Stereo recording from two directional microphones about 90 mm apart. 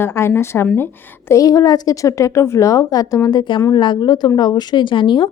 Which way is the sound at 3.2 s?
55° left (ahead or behind).